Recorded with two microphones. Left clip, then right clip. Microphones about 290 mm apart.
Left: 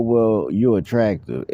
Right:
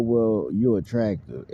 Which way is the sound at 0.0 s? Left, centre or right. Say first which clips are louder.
Left 5 dB; left.